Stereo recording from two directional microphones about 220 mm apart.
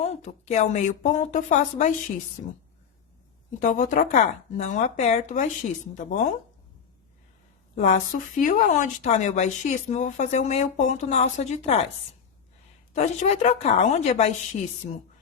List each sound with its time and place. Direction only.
0.0 s speech: 30° left (ahead or behind)
3.6 s speech: 35° left (ahead or behind)
7.8 s speech: 35° left (ahead or behind)
12.9 s speech: 30° left (ahead or behind)